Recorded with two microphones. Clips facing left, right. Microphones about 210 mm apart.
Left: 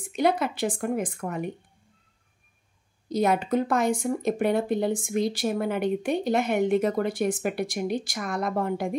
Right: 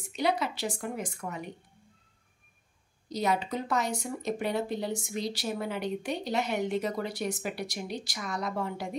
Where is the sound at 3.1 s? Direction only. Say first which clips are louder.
Left 6 dB; 55° left (ahead or behind).